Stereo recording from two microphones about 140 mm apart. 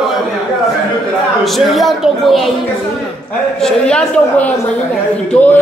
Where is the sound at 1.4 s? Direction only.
Centre (ahead or behind).